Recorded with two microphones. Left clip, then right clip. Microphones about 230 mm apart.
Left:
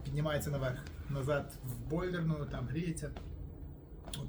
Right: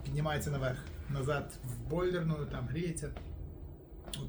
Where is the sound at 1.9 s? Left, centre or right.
Centre.